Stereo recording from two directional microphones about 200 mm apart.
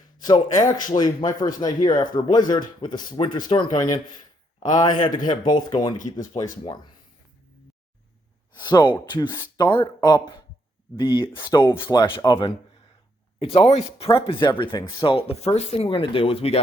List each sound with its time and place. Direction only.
0.2 s speech: 20° left (ahead or behind)
8.5 s speech: 20° left (ahead or behind)